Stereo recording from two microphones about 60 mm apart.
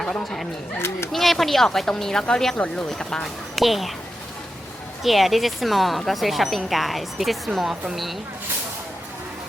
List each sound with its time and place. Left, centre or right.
0.0 s speech: centre
0.8 s speech: left
1.1 s speech: centre
3.5 s a woman's voice: centre
5.0 s speech: centre